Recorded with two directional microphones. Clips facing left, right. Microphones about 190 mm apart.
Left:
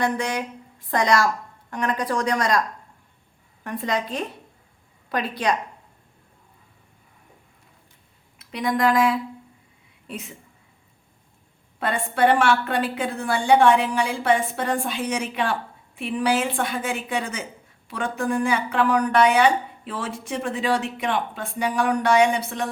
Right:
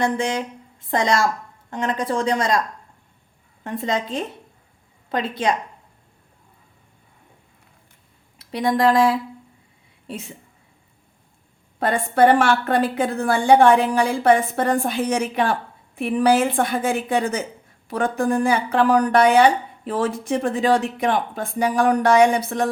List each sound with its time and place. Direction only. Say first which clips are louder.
0.0 s a woman's voice: right 2 dB; 25° right (ahead or behind)
3.6 s speech: right 2 dB; 25° right (ahead or behind)
8.4 s speech: right 3 dB; 30° right (ahead or behind)
11.8 s speech: right 4 dB; 40° right (ahead or behind)